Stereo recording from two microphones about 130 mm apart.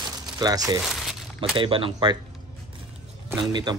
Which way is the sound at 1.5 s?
40° right (ahead or behind).